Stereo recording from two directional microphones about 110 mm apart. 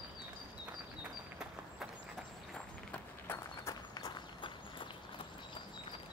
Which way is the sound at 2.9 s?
20° left (ahead or behind).